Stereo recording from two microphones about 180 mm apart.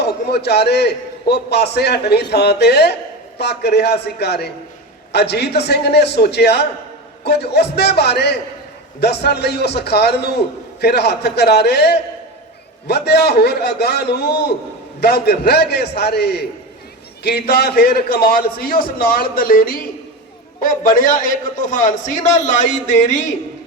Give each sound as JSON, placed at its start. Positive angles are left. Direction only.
{"t": 0.0, "sound": "a man's voice", "side_deg": 65}